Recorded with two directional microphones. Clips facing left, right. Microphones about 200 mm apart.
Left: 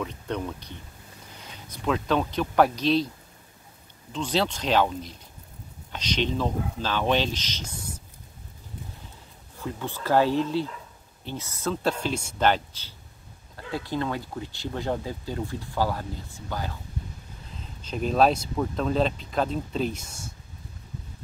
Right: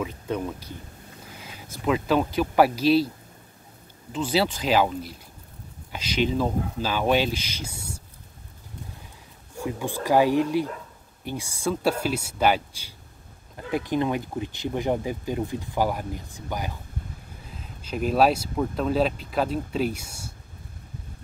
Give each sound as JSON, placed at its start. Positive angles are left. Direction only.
{"t": 0.0, "sound": "speech", "side_deg": -5}
{"t": 4.1, "sound": "speech", "side_deg": -5}
{"t": 9.6, "sound": "speech", "side_deg": -15}